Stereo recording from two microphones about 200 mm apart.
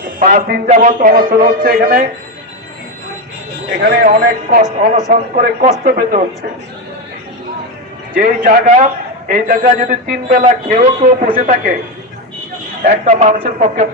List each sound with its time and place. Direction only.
0.2 s a man's voice: 45° right (ahead or behind)
3.8 s a man's voice: 50° right (ahead or behind)
8.1 s a man's voice: 40° right (ahead or behind)
12.8 s a man's voice: 40° right (ahead or behind)